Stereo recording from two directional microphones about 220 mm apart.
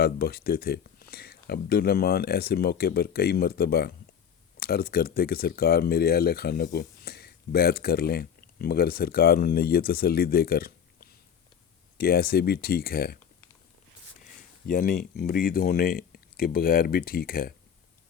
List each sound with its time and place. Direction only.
0.0 s speech: 45° left (ahead or behind)
14.2 s speech: 40° left (ahead or behind)